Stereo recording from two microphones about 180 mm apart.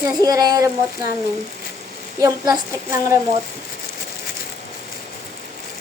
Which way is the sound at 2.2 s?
20° right (ahead or behind).